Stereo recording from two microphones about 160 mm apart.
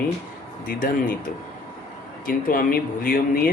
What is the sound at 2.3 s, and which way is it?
Speech, 65° left (ahead or behind).